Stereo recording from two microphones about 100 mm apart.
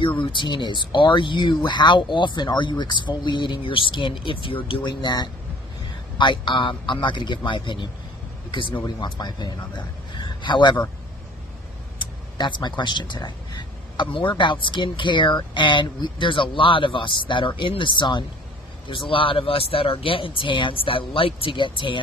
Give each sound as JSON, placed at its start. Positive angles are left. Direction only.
{"t": 0.2, "sound": "speech", "side_deg": 55}
{"t": 5.0, "sound": "speech", "side_deg": 45}
{"t": 8.8, "sound": "a man's voice", "side_deg": 45}
{"t": 12.0, "sound": "speech", "side_deg": 50}